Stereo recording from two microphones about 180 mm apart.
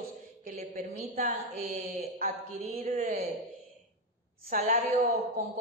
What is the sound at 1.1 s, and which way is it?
A woman's voice, 40° right (ahead or behind).